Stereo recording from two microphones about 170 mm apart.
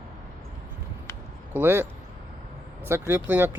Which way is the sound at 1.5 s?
10° right (ahead or behind).